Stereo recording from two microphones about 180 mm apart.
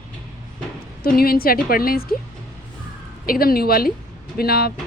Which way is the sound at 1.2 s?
55° left (ahead or behind).